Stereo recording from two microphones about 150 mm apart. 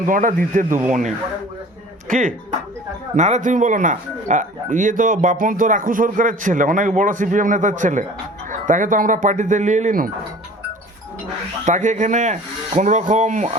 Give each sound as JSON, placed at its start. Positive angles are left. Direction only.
{"t": 0.0, "sound": "speech", "side_deg": -60}
{"t": 3.2, "sound": "speech", "side_deg": -50}
{"t": 11.6, "sound": "speech", "side_deg": -55}